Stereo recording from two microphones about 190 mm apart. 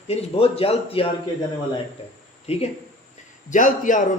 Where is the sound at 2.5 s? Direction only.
35° left (ahead or behind).